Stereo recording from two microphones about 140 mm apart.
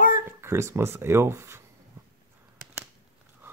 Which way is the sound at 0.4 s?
20° right (ahead or behind).